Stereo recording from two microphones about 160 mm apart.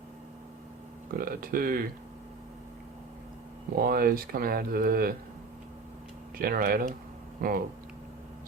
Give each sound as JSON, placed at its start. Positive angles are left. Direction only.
{"t": 1.2, "sound": "speech", "side_deg": -65}
{"t": 3.8, "sound": "speech", "side_deg": -70}
{"t": 6.3, "sound": "speech", "side_deg": -65}